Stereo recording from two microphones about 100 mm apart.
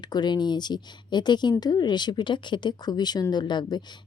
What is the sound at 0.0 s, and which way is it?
A woman's voice, 45° left (ahead or behind).